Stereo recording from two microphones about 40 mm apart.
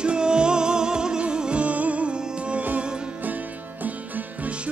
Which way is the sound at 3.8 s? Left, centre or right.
Right.